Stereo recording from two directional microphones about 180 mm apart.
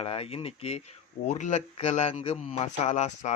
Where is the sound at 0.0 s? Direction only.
35° left (ahead or behind).